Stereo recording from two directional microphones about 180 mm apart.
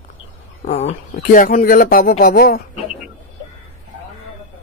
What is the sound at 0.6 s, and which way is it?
Speech, 35° left (ahead or behind).